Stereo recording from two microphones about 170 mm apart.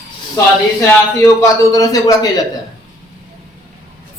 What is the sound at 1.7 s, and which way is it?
Speech, 20° left (ahead or behind).